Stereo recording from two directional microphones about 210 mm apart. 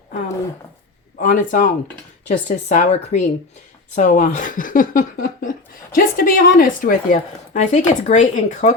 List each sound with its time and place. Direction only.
1.2 s speech: 40° left (ahead or behind)